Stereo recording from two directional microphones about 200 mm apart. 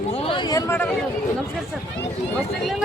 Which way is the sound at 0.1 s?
25° left (ahead or behind).